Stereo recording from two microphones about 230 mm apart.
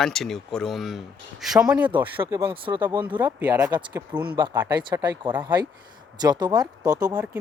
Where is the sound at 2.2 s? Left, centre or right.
Centre.